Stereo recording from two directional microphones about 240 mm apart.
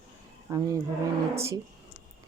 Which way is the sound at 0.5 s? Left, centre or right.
Centre.